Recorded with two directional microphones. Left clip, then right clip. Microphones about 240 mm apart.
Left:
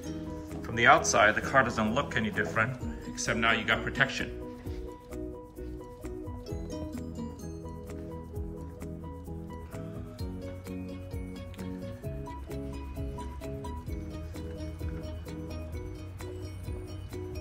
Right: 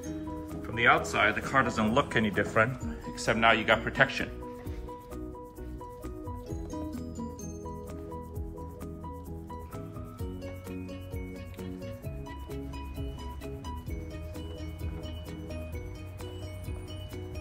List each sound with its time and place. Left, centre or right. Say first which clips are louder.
0.6 s speech: left 2 dB; centre
6.7 s music: right 2 dB; centre